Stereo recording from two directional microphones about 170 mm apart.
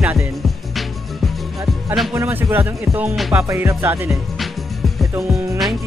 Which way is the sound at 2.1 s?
15° right (ahead or behind).